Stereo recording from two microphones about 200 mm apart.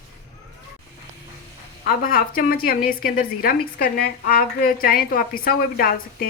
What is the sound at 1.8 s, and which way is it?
A woman's voice, 45° left (ahead or behind).